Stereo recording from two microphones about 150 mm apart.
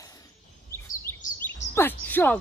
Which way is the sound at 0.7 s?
15° left (ahead or behind).